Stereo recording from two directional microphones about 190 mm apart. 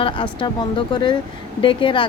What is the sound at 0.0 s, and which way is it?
Speech, 25° left (ahead or behind).